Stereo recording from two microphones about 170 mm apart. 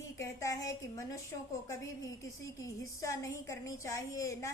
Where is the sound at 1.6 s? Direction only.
20° left (ahead or behind).